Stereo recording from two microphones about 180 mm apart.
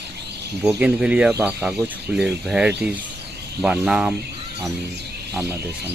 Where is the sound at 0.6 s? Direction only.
5° right (ahead or behind).